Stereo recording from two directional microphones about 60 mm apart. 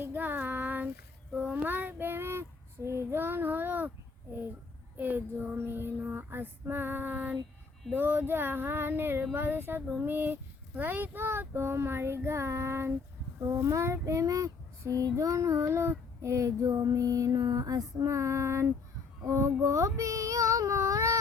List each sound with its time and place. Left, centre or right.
0.0 s child singing: right
1.6 s child singing: right
4.9 s child singing: right
7.9 s female singing: right
9.3 s a sound: right
10.8 s child singing: right
13.4 s child singing: right
19.6 s speech: right